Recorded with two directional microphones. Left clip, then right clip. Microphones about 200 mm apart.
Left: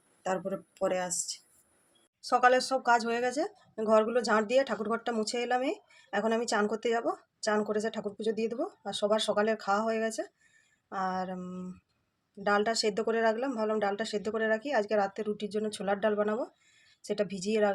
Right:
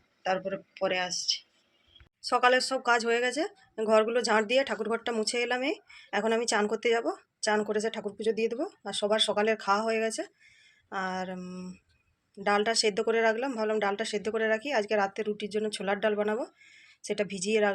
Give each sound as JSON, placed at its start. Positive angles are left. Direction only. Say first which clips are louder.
{"t": 0.2, "sound": "speech", "louder": "right 3 dB", "side_deg": 15}
{"t": 2.2, "sound": "speech", "louder": "even", "side_deg": 5}